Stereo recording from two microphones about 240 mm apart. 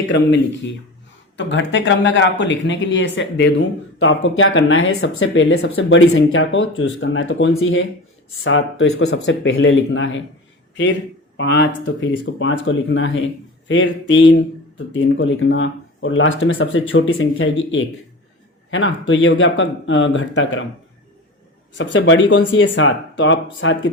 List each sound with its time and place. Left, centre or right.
0.1 s speech: left
11.3 s speech: left
17.2 s speech: left
21.9 s speech: left
22.6 s speech: left
23.1 s speech: left